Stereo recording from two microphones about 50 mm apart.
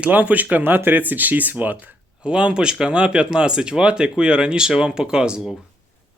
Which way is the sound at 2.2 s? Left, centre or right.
Centre.